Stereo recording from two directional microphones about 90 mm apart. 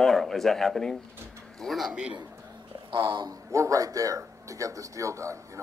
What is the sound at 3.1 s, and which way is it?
Speech, 55° right (ahead or behind).